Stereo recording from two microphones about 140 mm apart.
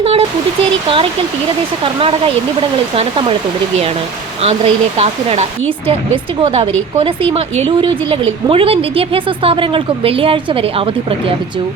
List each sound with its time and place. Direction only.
0.0 s speech: 45° right (ahead or behind)
1.8 s speech: 40° right (ahead or behind)
4.4 s speech: 45° right (ahead or behind)